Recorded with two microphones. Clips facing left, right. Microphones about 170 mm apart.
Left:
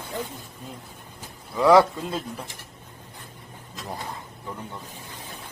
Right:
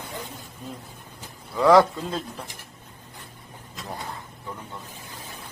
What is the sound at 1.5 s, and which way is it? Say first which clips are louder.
Speech: even; 15° left (ahead or behind).